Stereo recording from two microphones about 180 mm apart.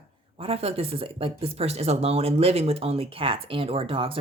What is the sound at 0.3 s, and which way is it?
Speech, 30° right (ahead or behind).